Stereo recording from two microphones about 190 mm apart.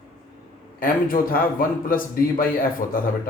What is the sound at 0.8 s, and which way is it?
A man's voice, 45° left (ahead or behind).